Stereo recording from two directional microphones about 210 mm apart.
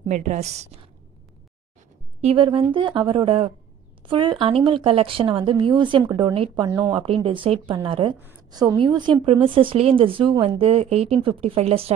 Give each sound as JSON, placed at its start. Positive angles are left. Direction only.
{"t": 0.1, "sound": "a woman's voice", "side_deg": -35}
{"t": 2.2, "sound": "speech", "side_deg": -25}